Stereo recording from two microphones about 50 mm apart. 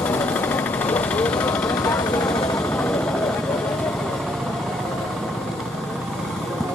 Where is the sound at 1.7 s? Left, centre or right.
Left.